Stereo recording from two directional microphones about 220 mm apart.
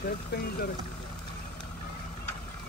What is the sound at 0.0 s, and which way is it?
Speech, 40° left (ahead or behind).